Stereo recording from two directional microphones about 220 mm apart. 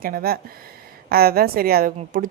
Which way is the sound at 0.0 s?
40° right (ahead or behind).